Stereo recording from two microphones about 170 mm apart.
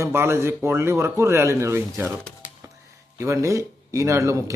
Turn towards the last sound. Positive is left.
turn(degrees=-20)  # may be behind; listen again after turning